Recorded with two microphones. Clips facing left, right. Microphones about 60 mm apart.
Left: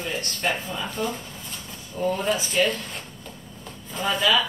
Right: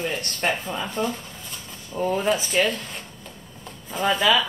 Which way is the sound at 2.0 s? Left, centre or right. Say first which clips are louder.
Right 2 dB; centre.